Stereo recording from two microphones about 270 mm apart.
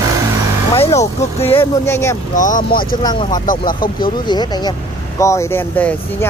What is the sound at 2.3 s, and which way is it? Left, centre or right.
Speech, left.